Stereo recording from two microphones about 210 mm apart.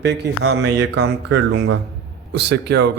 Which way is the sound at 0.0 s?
55° right (ahead or behind).